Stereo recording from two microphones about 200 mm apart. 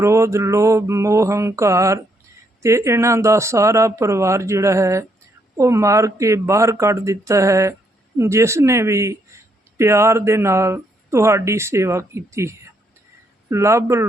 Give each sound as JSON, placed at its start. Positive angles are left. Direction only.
{"t": 0.0, "sound": "speech", "side_deg": -15}